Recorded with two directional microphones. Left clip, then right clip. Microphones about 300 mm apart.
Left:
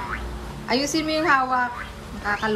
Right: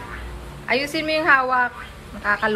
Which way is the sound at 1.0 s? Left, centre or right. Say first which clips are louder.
Right 4 dB; centre.